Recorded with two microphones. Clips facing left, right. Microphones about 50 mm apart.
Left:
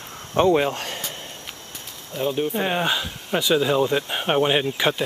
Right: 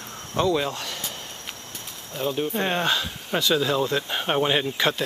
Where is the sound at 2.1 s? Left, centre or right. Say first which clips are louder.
Left 2 dB; centre.